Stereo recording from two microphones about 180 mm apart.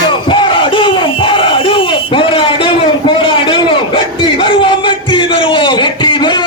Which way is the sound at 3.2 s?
30° left (ahead or behind).